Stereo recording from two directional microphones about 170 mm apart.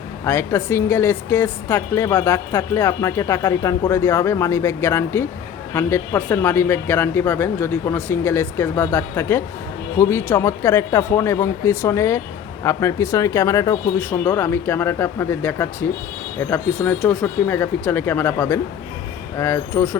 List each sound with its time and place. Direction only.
0.3 s a woman's voice: 15° left (ahead or behind)